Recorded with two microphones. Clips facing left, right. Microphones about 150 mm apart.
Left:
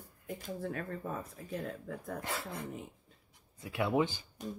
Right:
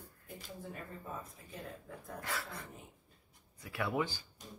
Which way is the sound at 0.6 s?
70° left (ahead or behind).